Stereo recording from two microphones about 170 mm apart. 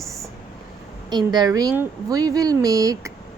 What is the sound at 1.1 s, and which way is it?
Speech, 25° right (ahead or behind).